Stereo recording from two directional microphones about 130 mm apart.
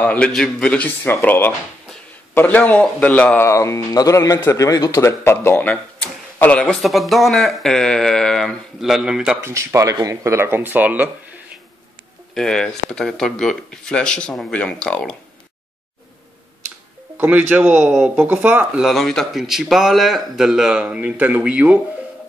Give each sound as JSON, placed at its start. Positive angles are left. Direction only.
{"t": 0.0, "sound": "speech", "side_deg": 10}
{"t": 3.4, "sound": "a man's voice", "side_deg": 20}
{"t": 9.4, "sound": "speech", "side_deg": -20}
{"t": 12.4, "sound": "speech", "side_deg": 5}
{"t": 17.2, "sound": "speech", "side_deg": -15}
{"t": 18.9, "sound": "a man's voice", "side_deg": 0}